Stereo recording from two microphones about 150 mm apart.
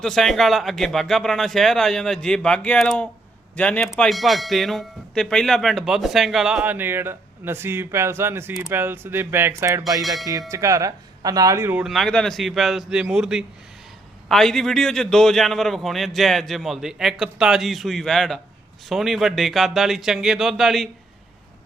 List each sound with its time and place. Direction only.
0.0 s speech: centre (ahead or behind); by 9.8 s 15° right (ahead or behind)
10.0 s speech: centre (ahead or behind)
10.5 s speech: 20° right (ahead or behind)
11.8 s speech: centre (ahead or behind)